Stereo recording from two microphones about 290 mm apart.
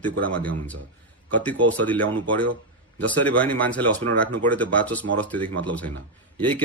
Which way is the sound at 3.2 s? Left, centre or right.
Centre.